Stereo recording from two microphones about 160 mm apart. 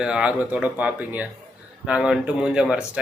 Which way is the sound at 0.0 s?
5° right (ahead or behind).